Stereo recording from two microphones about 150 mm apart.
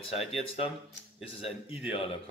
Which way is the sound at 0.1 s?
40° left (ahead or behind).